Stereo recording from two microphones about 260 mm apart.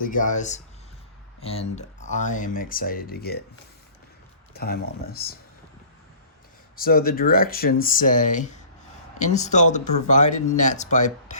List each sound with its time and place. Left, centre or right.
0.0 s speech: left
4.5 s speech: left
6.7 s speech: left